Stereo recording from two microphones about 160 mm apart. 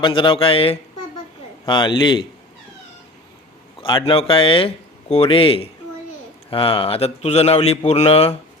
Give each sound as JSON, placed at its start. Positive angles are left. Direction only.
{"t": 0.0, "sound": "a man's voice", "side_deg": 30}
{"t": 3.8, "sound": "speech", "side_deg": 30}